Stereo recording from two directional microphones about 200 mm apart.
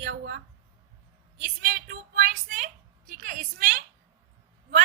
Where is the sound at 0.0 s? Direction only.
50° right (ahead or behind).